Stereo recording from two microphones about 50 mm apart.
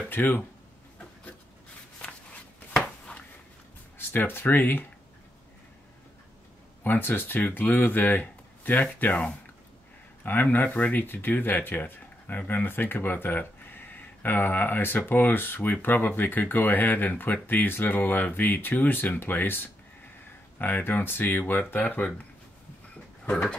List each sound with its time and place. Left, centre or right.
0.1 s speech: left
3.1 s a sound: left
4.1 s speech: left
6.8 s speech: left